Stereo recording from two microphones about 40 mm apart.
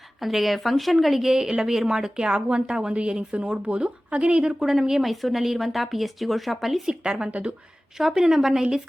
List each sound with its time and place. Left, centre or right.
0.2 s speech: centre; by 4.5 s right
4.6 s speech: centre
6.8 s speech: centre
7.3 s speech: right
7.9 s speech: centre